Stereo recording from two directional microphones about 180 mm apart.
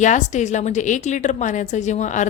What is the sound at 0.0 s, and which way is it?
A woman's voice, 40° left (ahead or behind).